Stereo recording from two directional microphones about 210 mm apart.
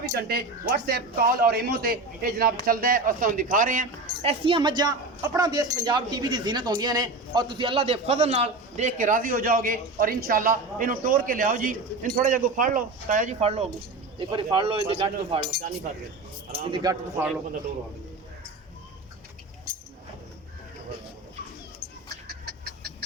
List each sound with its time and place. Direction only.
0.0 s a man's voice: 45° right (ahead or behind); by 15.4 s 25° right (ahead or behind)
16.5 s speech: 20° right (ahead or behind)
22.3 s chicken: 50° right (ahead or behind)